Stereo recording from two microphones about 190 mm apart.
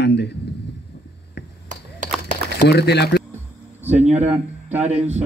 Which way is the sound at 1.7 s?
40° right (ahead or behind).